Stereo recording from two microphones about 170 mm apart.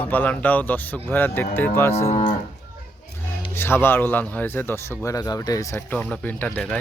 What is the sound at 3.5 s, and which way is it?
A man's voice, 15° left (ahead or behind).